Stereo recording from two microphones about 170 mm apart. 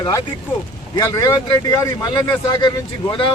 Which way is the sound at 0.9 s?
20° left (ahead or behind).